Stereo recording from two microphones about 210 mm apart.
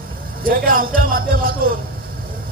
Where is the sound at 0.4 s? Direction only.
45° right (ahead or behind).